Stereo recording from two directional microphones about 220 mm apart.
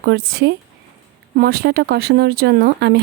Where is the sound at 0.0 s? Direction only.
45° right (ahead or behind).